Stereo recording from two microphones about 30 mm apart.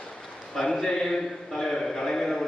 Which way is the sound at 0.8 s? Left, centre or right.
Centre.